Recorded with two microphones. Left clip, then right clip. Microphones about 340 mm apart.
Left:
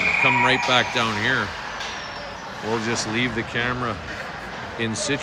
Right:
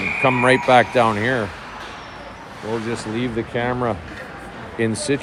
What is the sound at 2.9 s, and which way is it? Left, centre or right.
Speech, centre.